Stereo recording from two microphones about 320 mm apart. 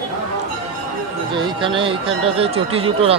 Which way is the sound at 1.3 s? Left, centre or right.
Centre.